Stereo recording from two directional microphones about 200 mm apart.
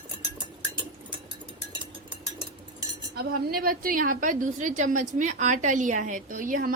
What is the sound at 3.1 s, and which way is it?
A woman's voice, 50° right (ahead or behind).